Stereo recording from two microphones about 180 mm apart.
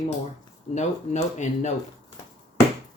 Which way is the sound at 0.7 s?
40° left (ahead or behind).